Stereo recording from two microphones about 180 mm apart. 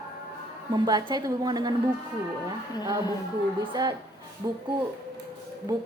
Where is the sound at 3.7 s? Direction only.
20° right (ahead or behind).